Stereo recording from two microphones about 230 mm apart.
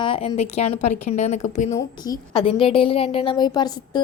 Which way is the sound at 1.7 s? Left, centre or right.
Centre.